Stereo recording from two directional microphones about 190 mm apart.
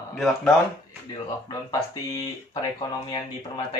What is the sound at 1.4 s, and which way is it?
Speech, 20° left (ahead or behind).